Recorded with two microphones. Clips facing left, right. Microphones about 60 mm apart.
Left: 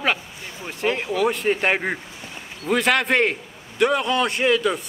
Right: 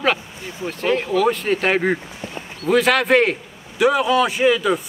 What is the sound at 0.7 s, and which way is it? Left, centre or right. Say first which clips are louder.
A man's voice: right 3 dB; centre.